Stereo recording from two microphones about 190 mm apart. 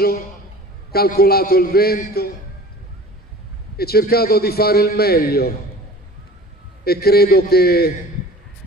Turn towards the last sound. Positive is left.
turn(degrees=55)  # may be behind; listen again after turning